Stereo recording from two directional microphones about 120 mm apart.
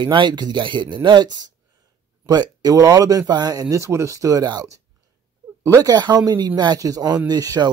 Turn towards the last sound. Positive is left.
turn(degrees=-35)  # may be behind; listen again after turning